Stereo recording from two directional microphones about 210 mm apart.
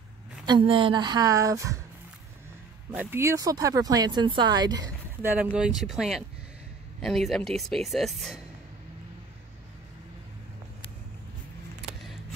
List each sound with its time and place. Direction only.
0.5 s a woman's voice: 25° right (ahead or behind)
2.9 s speech: 10° right (ahead or behind)
12.0 s music: centre (ahead or behind)